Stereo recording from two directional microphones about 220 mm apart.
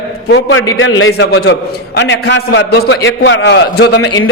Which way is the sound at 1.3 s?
50° left (ahead or behind).